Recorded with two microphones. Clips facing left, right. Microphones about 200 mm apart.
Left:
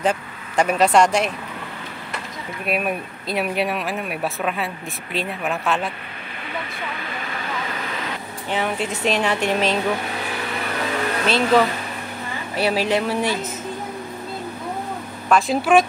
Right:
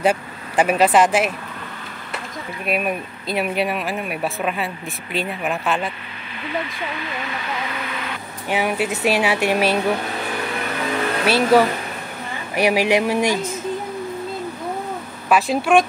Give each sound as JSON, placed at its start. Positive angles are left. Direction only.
{"t": 0.0, "sound": "speech", "side_deg": -10}
{"t": 2.6, "sound": "speech", "side_deg": 0}
{"t": 6.9, "sound": "speech", "side_deg": 45}
{"t": 8.5, "sound": "speech", "side_deg": -10}
{"t": 11.2, "sound": "speech", "side_deg": -10}
{"t": 15.2, "sound": "speech", "side_deg": -5}